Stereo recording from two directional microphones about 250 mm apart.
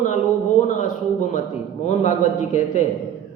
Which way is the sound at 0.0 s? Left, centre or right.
Left.